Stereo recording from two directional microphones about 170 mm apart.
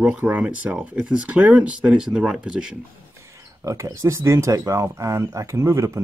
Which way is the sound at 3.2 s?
15° right (ahead or behind).